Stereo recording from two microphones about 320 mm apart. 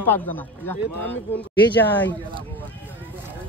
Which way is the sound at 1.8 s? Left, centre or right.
Centre.